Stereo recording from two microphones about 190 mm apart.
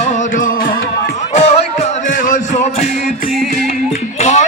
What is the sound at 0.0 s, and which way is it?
Music, 45° left (ahead or behind).